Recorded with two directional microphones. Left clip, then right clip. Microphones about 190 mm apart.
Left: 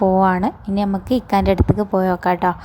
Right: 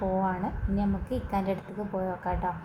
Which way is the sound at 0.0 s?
50° left (ahead or behind).